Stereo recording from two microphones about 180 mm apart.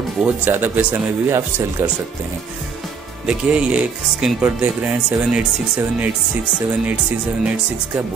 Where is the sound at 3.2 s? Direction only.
5° right (ahead or behind).